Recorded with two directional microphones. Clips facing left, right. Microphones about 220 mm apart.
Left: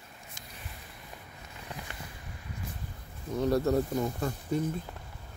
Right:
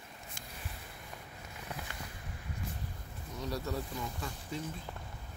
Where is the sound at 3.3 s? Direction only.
55° left (ahead or behind).